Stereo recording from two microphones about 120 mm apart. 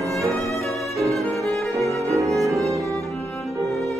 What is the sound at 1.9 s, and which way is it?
Music, 25° right (ahead or behind).